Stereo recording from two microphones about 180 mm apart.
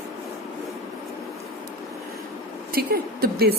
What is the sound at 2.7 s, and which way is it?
Speech, 55° right (ahead or behind).